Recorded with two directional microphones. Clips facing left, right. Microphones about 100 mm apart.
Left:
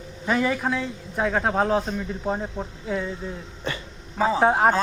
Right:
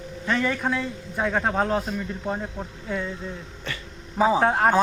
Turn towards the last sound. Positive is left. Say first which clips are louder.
# left 2 dB
turn(degrees=10)  # may be behind; listen again after turning